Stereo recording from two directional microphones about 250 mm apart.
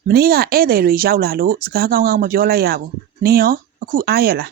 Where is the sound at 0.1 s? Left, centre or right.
Right.